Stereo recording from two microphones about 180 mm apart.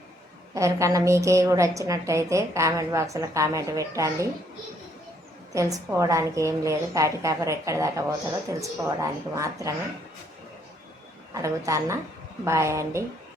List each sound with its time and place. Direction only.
0.5 s a woman's voice: 15° right (ahead or behind)
5.5 s a woman's voice: 15° right (ahead or behind)
11.3 s a woman's voice: 15° right (ahead or behind)